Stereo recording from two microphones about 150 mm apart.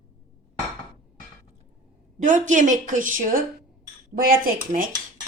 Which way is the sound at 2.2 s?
55° right (ahead or behind).